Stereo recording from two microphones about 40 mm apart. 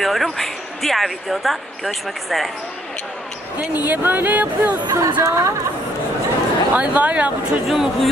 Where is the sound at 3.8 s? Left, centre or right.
Right.